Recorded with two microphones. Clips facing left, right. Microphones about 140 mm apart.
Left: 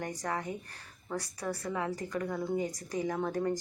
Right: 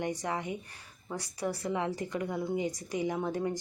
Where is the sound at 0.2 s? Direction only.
20° right (ahead or behind).